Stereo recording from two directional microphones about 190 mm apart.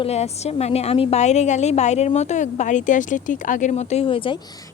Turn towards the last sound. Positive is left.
turn(degrees=25)  # may be behind; listen again after turning